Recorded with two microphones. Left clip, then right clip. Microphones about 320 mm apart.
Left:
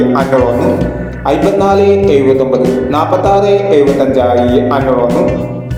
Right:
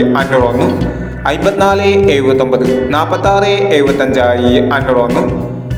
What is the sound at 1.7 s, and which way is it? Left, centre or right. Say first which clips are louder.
Mantra: left 3 dB; right.